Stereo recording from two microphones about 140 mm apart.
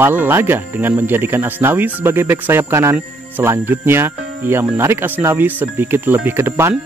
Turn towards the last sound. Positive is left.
turn(degrees=-20)  # may be behind; listen again after turning